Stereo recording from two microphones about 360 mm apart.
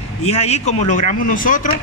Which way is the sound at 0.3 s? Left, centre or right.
Centre.